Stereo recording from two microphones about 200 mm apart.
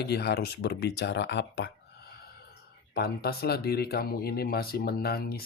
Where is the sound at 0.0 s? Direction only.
55° left (ahead or behind).